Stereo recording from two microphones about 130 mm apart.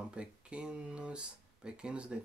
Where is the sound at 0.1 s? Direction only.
10° right (ahead or behind).